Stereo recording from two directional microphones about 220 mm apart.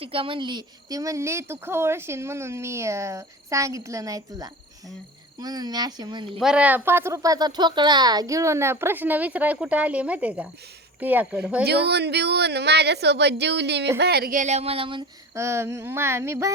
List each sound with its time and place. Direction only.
0.0 s speech: 25° right (ahead or behind)
6.4 s speech: 5° right (ahead or behind)
11.6 s speech: 50° right (ahead or behind); by 16.5 s 10° right (ahead or behind)